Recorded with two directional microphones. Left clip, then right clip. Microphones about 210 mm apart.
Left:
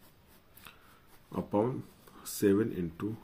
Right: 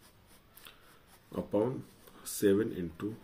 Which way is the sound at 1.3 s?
40° left (ahead or behind).